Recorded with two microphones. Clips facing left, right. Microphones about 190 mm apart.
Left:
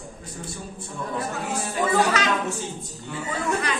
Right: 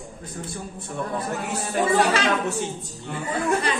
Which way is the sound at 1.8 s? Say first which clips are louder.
Right 2 dB; 30° right (ahead or behind).